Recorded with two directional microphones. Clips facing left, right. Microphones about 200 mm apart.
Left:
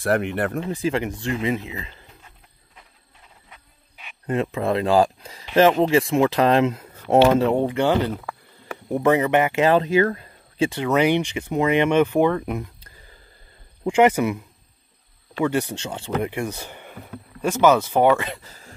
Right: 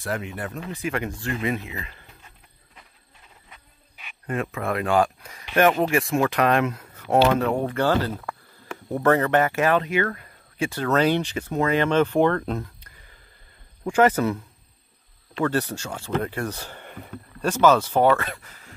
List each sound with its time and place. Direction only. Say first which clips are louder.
0.0 s speech: left 8 dB; 65° left (ahead or behind)
0.6 s speech: left 5 dB; 30° left (ahead or behind)
4.3 s speech: left 5 dB; 25° left (ahead or behind)
9.7 s speech: left 4 dB; 30° left (ahead or behind); by 12.7 s 15° left (ahead or behind)
13.8 s speech: left 2 dB; 15° left (ahead or behind)